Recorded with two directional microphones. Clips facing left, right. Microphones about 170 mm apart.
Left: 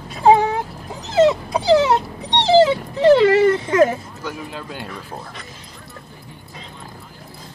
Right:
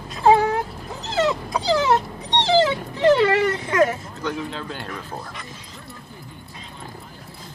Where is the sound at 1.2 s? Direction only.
25° left (ahead or behind).